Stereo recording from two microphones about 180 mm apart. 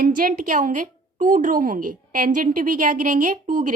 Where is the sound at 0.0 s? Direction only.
50° right (ahead or behind).